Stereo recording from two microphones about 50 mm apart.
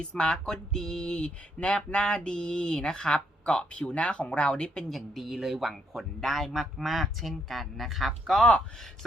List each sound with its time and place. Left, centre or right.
0.0 s speech: centre
4.9 s speech: centre